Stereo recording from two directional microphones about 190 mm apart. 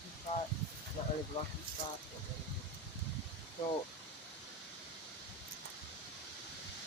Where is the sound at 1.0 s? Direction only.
45° left (ahead or behind).